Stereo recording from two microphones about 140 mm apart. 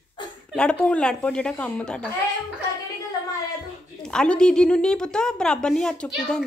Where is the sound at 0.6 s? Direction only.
5° left (ahead or behind).